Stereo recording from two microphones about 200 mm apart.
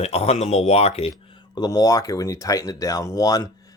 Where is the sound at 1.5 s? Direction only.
20° left (ahead or behind).